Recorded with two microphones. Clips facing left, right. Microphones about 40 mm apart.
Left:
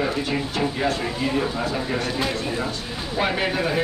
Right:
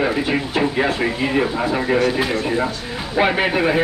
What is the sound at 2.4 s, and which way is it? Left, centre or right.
Speech, right.